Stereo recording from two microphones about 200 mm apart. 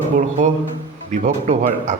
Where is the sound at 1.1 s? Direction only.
40° right (ahead or behind).